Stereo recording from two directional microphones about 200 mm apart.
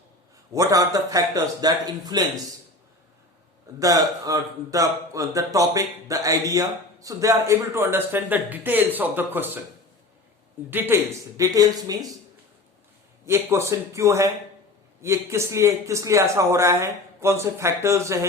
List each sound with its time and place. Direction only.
0.5 s a man's voice: 15° right (ahead or behind)
3.8 s a man's voice: 15° right (ahead or behind)
10.7 s a man's voice: 10° right (ahead or behind)
13.2 s a man's voice: 15° right (ahead or behind)